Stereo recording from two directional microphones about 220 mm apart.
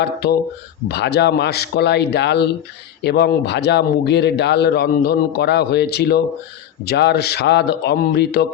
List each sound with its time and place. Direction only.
0.0 s a man's voice: 45° left (ahead or behind)